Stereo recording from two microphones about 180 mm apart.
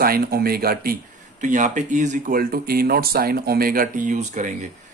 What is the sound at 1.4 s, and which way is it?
Speech, 45° right (ahead or behind).